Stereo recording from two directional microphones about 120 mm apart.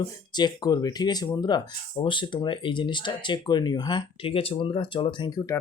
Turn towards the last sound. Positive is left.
turn(degrees=35)  # may be behind; listen again after turning